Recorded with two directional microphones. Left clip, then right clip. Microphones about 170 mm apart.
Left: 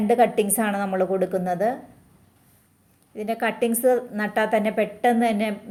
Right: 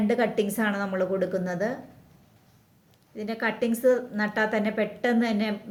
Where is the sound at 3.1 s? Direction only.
15° left (ahead or behind).